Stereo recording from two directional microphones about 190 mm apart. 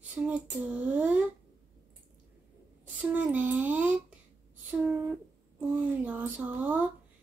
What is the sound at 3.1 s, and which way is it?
Speech, 10° right (ahead or behind).